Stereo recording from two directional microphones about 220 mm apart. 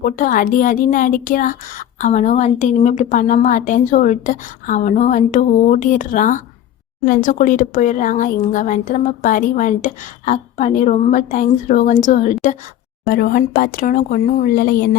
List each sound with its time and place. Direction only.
0.0 s a woman's voice: 40° left (ahead or behind)